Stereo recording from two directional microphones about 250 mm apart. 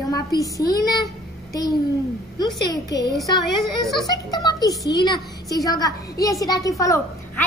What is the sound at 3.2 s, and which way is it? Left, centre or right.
Speech, centre.